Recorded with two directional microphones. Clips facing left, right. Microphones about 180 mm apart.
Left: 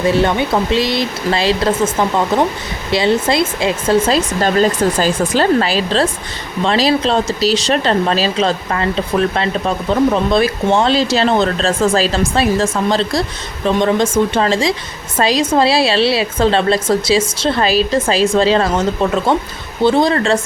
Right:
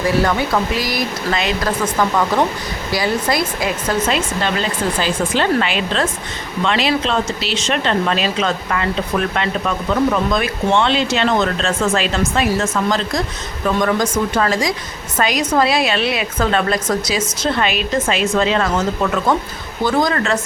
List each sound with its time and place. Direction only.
0.0 s a woman's voice: 25° left (ahead or behind)